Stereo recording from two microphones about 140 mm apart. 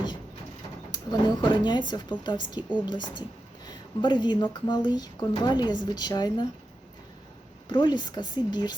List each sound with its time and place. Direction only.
0.9 s speech: 30° left (ahead or behind)
2.6 s a woman's voice: 10° right (ahead or behind)
2.8 s speech: 30° left (ahead or behind)
7.7 s speech: 30° left (ahead or behind)